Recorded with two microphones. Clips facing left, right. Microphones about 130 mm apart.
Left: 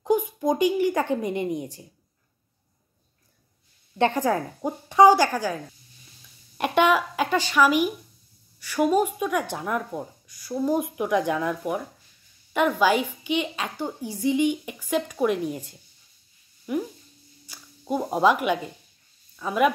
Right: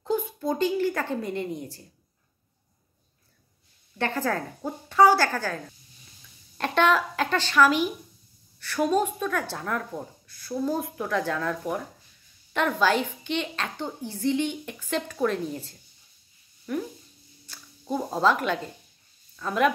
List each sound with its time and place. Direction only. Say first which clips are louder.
0.0 s a woman's voice: left 5 dB; 15° left (ahead or behind)
4.0 s speech: left 5 dB; 15° left (ahead or behind)
6.6 s speech: left 2 dB; 15° left (ahead or behind)